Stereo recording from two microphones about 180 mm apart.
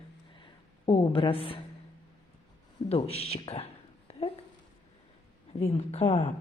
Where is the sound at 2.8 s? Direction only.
35° left (ahead or behind).